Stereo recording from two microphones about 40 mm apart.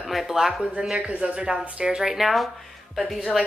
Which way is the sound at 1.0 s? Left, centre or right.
Right.